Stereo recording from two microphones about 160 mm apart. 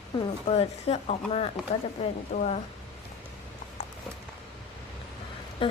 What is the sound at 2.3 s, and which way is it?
Speech, 50° left (ahead or behind).